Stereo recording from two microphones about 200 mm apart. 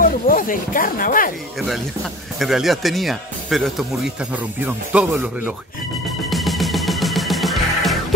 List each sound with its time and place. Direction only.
0.3 s speech: 45° left (ahead or behind)
2.3 s speech: centre (ahead or behind)
6.3 s music: centre (ahead or behind)